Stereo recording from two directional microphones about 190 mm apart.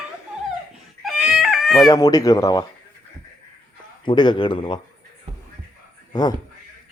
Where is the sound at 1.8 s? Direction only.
20° left (ahead or behind).